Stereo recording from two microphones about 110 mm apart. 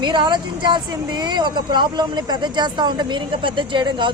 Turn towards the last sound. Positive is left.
turn(degrees=-45)  # may be behind; listen again after turning